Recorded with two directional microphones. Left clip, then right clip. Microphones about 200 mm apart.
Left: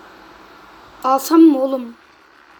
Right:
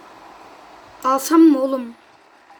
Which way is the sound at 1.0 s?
35° right (ahead or behind).